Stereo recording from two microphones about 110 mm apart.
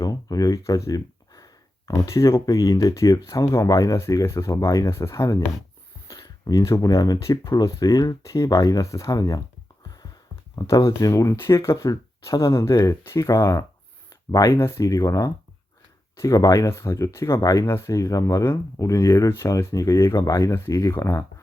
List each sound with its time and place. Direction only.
0.0 s a sound: 35° left (ahead or behind)
2.0 s speech: 30° left (ahead or behind)
10.5 s speech: 30° left (ahead or behind)